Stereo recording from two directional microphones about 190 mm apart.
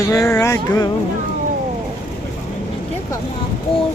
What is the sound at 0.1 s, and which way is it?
Music, 20° left (ahead or behind).